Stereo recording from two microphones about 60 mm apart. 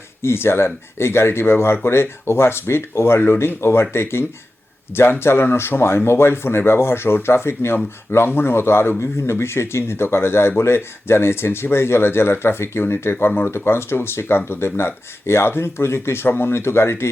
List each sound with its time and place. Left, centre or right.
0.2 s speech: left